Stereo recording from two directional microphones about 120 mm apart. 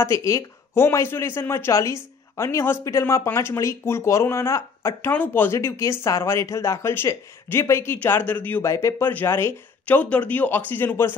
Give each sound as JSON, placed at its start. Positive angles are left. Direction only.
{"t": 0.0, "sound": "speech", "side_deg": 25}